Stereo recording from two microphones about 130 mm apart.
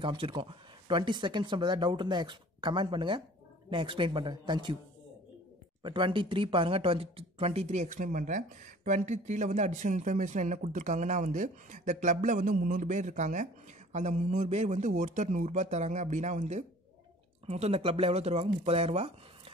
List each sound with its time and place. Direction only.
0.0 s speech: 40° right (ahead or behind)
5.8 s a man's voice: 40° right (ahead or behind); by 16.6 s 60° right (ahead or behind)
17.5 s speech: 50° right (ahead or behind)